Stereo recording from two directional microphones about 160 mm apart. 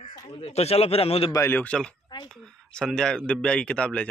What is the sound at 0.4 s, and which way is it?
Speech, 40° left (ahead or behind).